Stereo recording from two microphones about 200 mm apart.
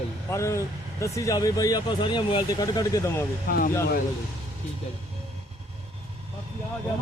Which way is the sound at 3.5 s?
50° left (ahead or behind).